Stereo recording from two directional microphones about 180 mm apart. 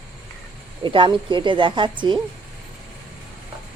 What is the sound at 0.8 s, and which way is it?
Speech, 25° right (ahead or behind).